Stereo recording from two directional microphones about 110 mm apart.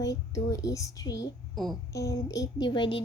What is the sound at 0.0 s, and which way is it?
Speech, 35° left (ahead or behind).